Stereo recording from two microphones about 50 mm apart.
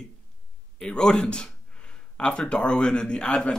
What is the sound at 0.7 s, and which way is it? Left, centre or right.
A man's voice, centre.